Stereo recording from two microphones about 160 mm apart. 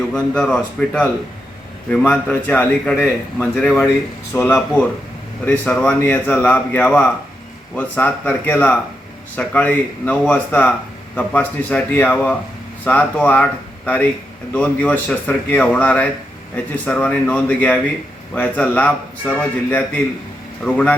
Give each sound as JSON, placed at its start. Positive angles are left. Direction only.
{"t": 0.1, "sound": "speech", "side_deg": 5}